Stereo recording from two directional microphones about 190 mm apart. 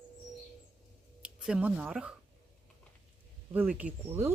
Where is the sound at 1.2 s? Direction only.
5° right (ahead or behind).